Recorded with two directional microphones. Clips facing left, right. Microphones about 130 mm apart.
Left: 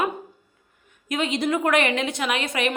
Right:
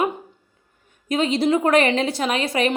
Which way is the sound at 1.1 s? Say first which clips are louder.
Right 5 dB; 30° right (ahead or behind).